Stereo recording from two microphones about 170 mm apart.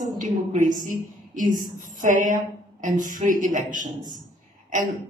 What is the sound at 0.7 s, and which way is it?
A woman's voice, 50° right (ahead or behind).